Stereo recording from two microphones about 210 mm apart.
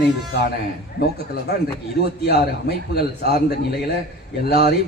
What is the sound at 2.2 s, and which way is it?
A man's voice, 50° left (ahead or behind).